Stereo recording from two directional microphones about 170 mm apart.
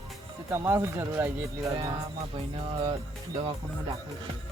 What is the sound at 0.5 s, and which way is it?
Speech, 15° right (ahead or behind).